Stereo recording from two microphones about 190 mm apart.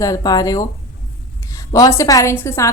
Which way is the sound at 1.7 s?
20° left (ahead or behind).